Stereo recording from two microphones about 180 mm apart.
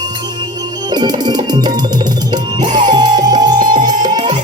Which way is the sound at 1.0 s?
25° right (ahead or behind).